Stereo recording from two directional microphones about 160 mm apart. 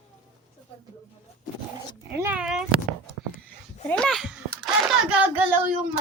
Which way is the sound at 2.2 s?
10° right (ahead or behind).